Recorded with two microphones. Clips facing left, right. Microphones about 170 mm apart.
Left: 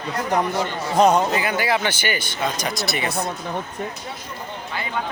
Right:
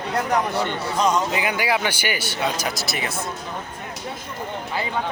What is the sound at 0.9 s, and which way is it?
Speech, 55° left (ahead or behind).